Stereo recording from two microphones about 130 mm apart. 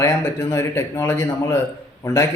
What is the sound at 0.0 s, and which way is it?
Speech, 20° left (ahead or behind).